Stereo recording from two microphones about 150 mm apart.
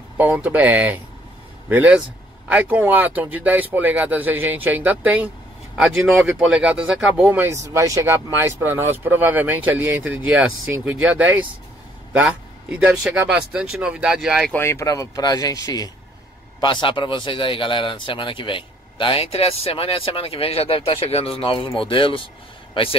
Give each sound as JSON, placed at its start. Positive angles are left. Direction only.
{"t": 0.2, "sound": "speech", "side_deg": -10}
{"t": 14.5, "sound": "speech", "side_deg": 15}